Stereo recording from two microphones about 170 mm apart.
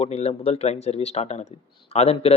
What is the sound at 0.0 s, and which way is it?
Speech, 40° left (ahead or behind).